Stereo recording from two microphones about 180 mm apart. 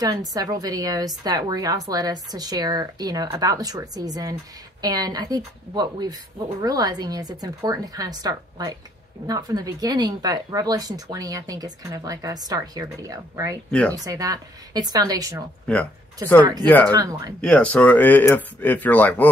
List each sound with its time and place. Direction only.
0.0 s a woman's voice: 20° right (ahead or behind)
13.7 s speech: 5° left (ahead or behind)
13.9 s a woman's voice: 20° right (ahead or behind)
15.6 s speech: 5° left (ahead or behind)
16.9 s a woman's voice: 20° right (ahead or behind)
17.4 s speech: 5° left (ahead or behind)